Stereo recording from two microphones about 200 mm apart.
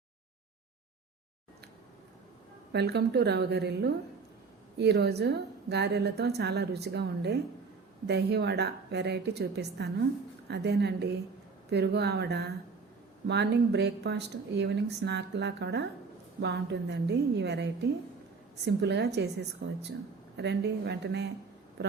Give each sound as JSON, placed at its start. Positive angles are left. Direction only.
{"t": 2.7, "sound": "speech", "side_deg": -55}